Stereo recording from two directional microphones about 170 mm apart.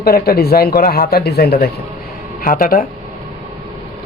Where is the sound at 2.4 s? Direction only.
55° left (ahead or behind).